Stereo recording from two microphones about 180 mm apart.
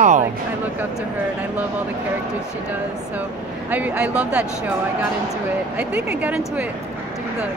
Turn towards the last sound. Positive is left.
turn(degrees=-5)  # may be behind; listen again after turning